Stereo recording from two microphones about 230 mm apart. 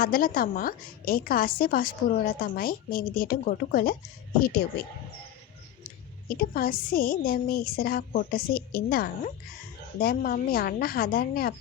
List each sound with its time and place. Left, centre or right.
0.0 s a woman's voice: left
6.2 s a woman's voice: left